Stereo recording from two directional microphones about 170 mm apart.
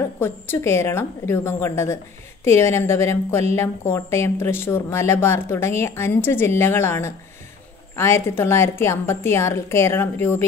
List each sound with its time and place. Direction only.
0.2 s a woman's voice: 15° left (ahead or behind)